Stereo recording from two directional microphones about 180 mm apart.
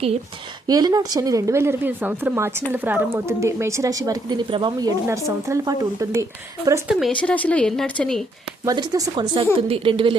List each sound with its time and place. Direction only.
0.7 s speech: 20° right (ahead or behind)
7.0 s speech: 5° left (ahead or behind)
8.6 s speech: 20° right (ahead or behind)